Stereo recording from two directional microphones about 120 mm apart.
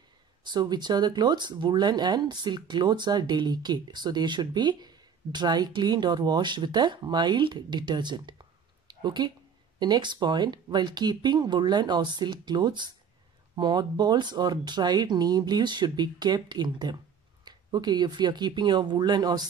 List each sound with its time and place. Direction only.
0.5 s speech: 35° right (ahead or behind)